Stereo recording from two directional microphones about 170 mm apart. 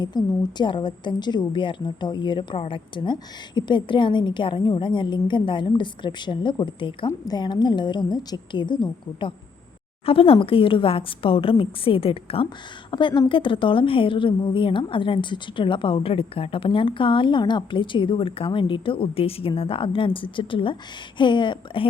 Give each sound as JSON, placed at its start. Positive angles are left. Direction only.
{"t": 0.1, "sound": "a woman's voice", "side_deg": 25}